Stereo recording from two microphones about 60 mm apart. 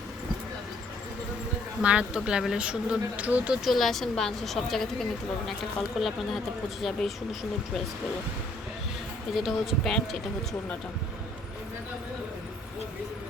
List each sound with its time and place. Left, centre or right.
1.8 s speech: centre
3.5 s a woman's voice: centre
9.3 s a woman's voice: centre